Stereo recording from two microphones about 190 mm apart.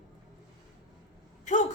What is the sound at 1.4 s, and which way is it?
Speech, 40° left (ahead or behind).